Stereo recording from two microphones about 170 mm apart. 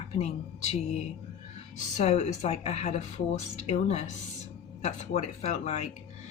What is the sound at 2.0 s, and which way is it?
A woman's voice, 40° left (ahead or behind).